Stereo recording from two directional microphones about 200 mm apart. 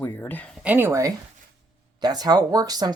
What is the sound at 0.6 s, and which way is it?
Speech, 10° right (ahead or behind).